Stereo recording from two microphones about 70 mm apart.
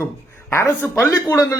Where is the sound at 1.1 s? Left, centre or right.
Left.